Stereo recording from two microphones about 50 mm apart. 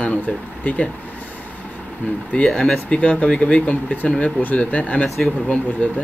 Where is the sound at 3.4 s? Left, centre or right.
Left.